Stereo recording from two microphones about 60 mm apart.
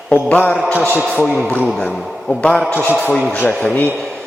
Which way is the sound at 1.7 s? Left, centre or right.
Centre.